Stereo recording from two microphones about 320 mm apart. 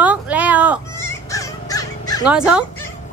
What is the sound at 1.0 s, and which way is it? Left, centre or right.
Crow, centre.